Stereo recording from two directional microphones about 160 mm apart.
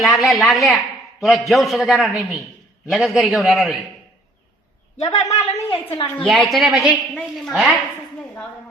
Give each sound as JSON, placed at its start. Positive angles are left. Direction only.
{"t": 0.0, "sound": "a man's voice", "side_deg": 0}
{"t": 5.2, "sound": "a woman's voice", "side_deg": 20}
{"t": 5.7, "sound": "a woman's voice", "side_deg": 35}
{"t": 6.2, "sound": "a man's voice", "side_deg": 0}
{"t": 7.1, "sound": "a woman's voice", "side_deg": 5}
{"t": 7.5, "sound": "a woman's voice", "side_deg": -10}